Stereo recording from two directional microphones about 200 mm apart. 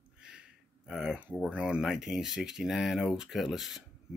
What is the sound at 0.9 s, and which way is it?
Speech, 5° right (ahead or behind).